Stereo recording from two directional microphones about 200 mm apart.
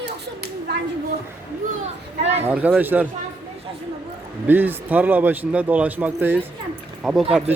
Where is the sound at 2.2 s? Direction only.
35° right (ahead or behind).